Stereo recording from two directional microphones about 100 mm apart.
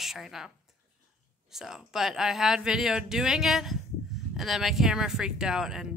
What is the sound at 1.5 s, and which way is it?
A woman's voice, 5° right (ahead or behind).